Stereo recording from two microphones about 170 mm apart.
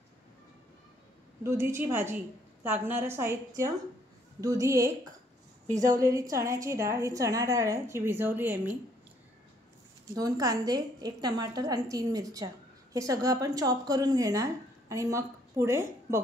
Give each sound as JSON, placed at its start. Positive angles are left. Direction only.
{"t": 1.4, "sound": "a woman's voice", "side_deg": -15}
{"t": 10.1, "sound": "speech", "side_deg": -20}